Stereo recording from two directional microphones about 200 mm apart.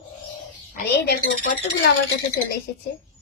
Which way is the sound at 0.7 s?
50° left (ahead or behind).